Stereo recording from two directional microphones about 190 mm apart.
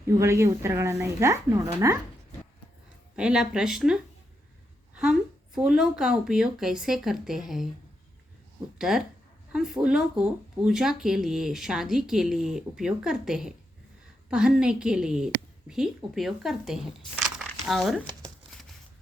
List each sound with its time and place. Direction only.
0.1 s a woman's voice: 15° right (ahead or behind)
3.2 s speech: 5° right (ahead or behind)
5.5 s speech: 5° right (ahead or behind)
8.8 s speech: 5° right (ahead or behind)